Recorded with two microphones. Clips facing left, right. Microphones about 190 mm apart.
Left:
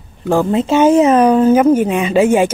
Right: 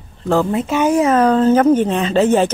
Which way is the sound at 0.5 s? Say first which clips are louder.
Left 5 dB; 25° left (ahead or behind).